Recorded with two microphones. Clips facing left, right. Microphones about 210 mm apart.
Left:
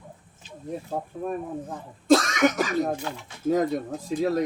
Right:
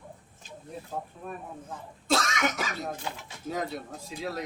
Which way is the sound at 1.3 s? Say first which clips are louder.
Left 10 dB; 45° left (ahead or behind).